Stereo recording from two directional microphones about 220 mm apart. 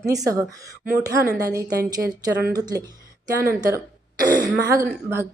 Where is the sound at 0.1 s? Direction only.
15° right (ahead or behind).